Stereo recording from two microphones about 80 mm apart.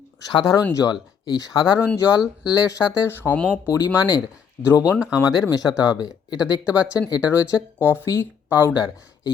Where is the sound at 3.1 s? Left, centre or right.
Left.